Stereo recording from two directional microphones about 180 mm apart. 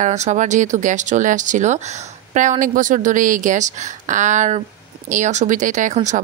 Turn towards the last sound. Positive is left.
turn(degrees=-45)  # may be behind; listen again after turning